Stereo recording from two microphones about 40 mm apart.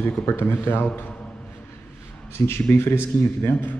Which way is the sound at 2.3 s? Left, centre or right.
Left.